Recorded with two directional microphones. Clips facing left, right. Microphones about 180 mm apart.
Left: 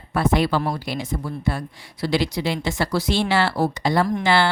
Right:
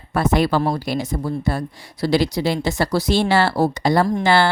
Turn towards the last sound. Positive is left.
turn(degrees=-40)  # may be behind; listen again after turning